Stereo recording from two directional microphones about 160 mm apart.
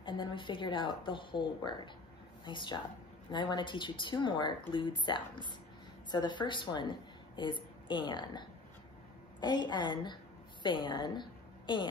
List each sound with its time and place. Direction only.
0.0 s a woman's voice: 30° left (ahead or behind)